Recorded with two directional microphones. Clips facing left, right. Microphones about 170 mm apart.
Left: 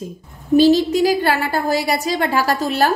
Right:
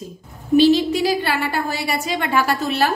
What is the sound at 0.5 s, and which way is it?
A woman's voice, 40° left (ahead or behind).